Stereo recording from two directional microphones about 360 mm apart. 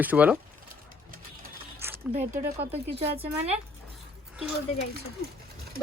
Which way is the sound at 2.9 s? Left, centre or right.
Centre.